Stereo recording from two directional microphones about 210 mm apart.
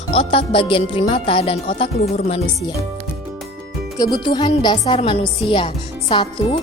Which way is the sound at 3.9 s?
20° left (ahead or behind).